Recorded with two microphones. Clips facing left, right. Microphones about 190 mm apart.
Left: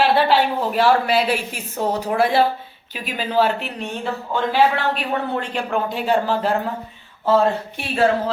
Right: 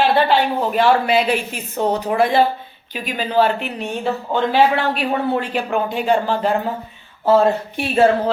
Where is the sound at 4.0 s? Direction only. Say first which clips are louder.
Right 4 dB; 20° right (ahead or behind).